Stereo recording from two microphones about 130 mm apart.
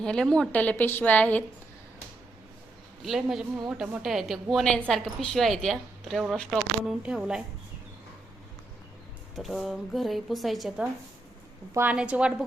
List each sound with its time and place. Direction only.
0.0 s a woman's voice: 5° left (ahead or behind)
3.0 s a woman's voice: centre (ahead or behind)
9.3 s a woman's voice: centre (ahead or behind)
11.7 s a woman's voice: 15° right (ahead or behind)